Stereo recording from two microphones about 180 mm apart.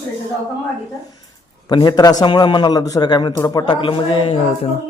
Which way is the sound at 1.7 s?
20° left (ahead or behind).